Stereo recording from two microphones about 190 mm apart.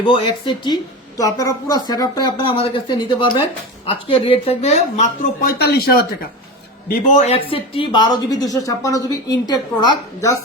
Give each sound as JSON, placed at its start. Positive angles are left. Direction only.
{"t": 0.0, "sound": "a woman's voice", "side_deg": 25}
{"t": 5.4, "sound": "speech", "side_deg": 55}
{"t": 6.8, "sound": "speech", "side_deg": 40}